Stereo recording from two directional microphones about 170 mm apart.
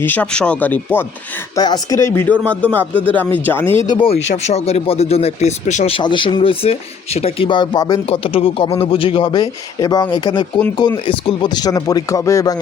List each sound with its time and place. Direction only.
0.0 s speech: 10° left (ahead or behind)
1.5 s speech: 25° left (ahead or behind)
3.8 s speech: 30° left (ahead or behind)
8.1 s speech: 35° left (ahead or behind); by 12.5 s 20° left (ahead or behind)